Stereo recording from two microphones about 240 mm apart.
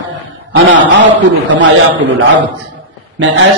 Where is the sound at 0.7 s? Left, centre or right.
Right.